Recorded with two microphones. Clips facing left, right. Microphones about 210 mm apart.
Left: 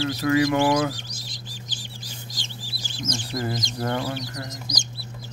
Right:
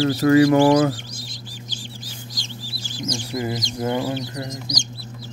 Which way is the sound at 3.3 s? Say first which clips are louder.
Right 3 dB; 15° right (ahead or behind).